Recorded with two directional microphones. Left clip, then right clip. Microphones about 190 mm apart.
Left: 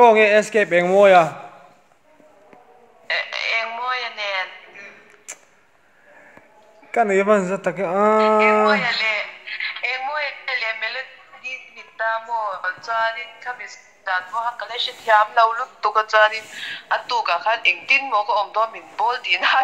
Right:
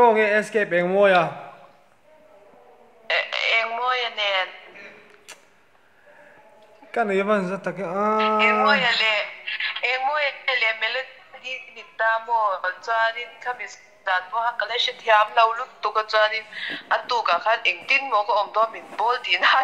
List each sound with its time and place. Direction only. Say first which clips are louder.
0.0 s a man's voice: left 5 dB; 40° left (ahead or behind)
3.1 s fart: right 1 dB; 25° right (ahead or behind)
6.9 s speech: left 5 dB; 40° left (ahead or behind)
8.6 s a man's voice: even; 25° right (ahead or behind); by 19.6 s 5° right (ahead or behind)